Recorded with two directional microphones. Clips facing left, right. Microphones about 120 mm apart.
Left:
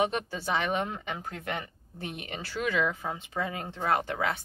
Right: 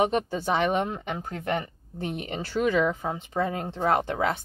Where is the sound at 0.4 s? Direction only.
25° right (ahead or behind).